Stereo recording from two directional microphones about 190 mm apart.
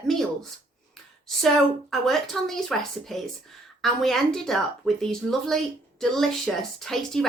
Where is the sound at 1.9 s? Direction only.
Centre (ahead or behind).